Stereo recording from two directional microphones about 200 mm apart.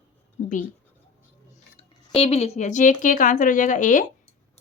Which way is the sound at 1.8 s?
30° left (ahead or behind).